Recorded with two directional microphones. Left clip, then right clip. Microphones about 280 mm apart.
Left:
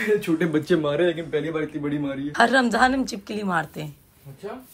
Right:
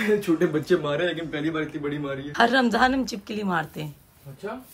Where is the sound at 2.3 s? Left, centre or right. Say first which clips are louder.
Left 1 dB; centre.